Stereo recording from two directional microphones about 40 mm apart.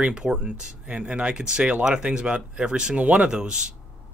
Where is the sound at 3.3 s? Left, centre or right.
Right.